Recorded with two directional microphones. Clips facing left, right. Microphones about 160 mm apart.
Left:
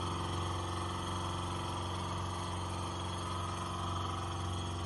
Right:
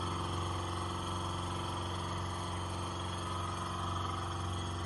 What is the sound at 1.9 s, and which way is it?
Vehicle, 10° left (ahead or behind).